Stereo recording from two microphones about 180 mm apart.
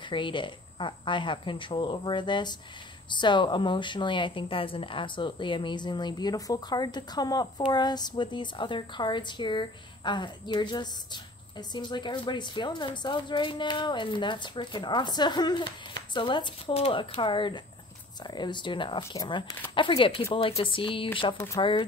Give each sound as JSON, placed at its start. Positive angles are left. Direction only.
{"t": 0.1, "sound": "speech", "side_deg": 25}